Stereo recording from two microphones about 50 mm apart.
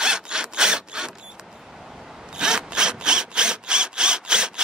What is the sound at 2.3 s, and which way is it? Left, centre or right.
Rub, centre.